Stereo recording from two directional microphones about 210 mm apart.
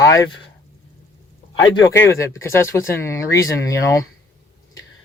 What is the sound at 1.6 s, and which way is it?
Speech, 15° left (ahead or behind).